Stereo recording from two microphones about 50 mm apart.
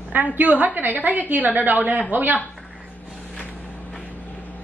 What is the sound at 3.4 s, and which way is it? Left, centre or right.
Vehicle, left.